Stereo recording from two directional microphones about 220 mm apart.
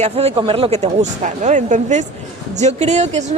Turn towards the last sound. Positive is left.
turn(degrees=-30)  # may be behind; listen again after turning